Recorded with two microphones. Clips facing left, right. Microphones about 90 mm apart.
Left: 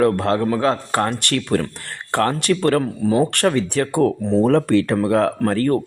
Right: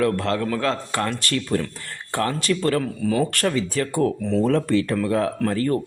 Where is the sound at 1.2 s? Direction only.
65° left (ahead or behind).